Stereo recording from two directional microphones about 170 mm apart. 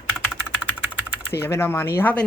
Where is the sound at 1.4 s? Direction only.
15° left (ahead or behind).